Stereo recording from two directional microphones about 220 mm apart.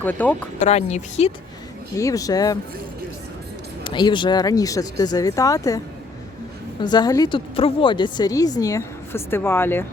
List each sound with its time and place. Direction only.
0.0 s a woman's voice: 10° left (ahead or behind)
0.6 s speech: 30° left (ahead or behind)
2.0 s a woman's voice: 15° left (ahead or behind)
3.8 s a woman's voice: 20° left (ahead or behind)